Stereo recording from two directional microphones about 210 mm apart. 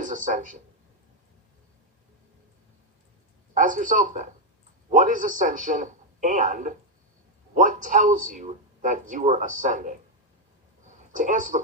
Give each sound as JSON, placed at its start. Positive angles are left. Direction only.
{"t": 0.0, "sound": "a man's voice", "side_deg": -40}
{"t": 3.5, "sound": "a man's voice", "side_deg": -40}
{"t": 11.1, "sound": "a man's voice", "side_deg": -40}